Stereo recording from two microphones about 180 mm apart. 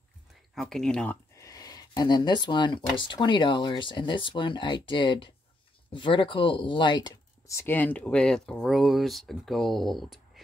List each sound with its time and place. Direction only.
0.6 s speech: centre (ahead or behind)
1.3 s speech: 20° left (ahead or behind); by 10.4 s centre (ahead or behind)